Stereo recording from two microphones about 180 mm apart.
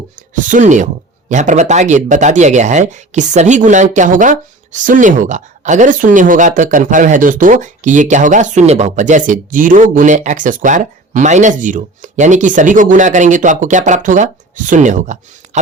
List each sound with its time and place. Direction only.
0.2 s speech: 45° right (ahead or behind)